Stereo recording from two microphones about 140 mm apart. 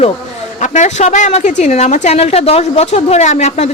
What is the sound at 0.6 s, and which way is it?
A woman's voice, 60° left (ahead or behind).